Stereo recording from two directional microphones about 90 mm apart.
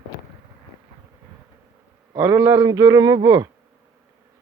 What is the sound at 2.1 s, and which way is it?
Speech, 35° right (ahead or behind).